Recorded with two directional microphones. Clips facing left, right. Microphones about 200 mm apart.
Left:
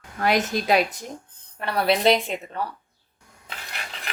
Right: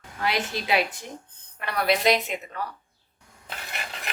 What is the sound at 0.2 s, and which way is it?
Speech, 45° left (ahead or behind).